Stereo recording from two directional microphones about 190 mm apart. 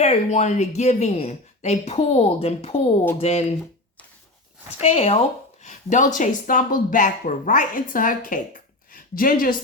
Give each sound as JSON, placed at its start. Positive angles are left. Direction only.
{"t": 0.0, "sound": "a woman's voice", "side_deg": 35}
{"t": 4.8, "sound": "a woman's voice", "side_deg": 35}